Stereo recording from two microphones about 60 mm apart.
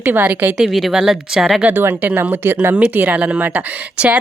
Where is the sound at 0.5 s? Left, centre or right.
Centre.